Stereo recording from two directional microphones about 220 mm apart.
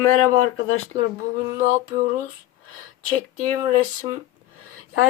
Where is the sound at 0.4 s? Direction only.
70° left (ahead or behind).